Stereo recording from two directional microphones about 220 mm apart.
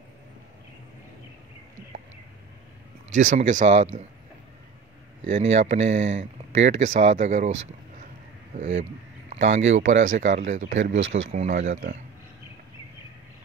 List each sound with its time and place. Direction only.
3.2 s speech: 35° right (ahead or behind)
5.2 s speech: 30° right (ahead or behind)
8.5 s speech: 30° right (ahead or behind)
10.6 s speech: 60° right (ahead or behind)
11.3 s speech: 30° right (ahead or behind)